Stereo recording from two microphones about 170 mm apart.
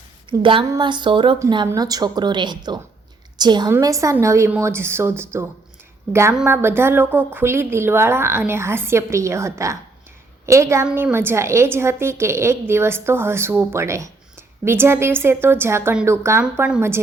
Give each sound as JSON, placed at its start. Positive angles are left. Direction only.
{"t": 0.3, "sound": "a woman's voice", "side_deg": -30}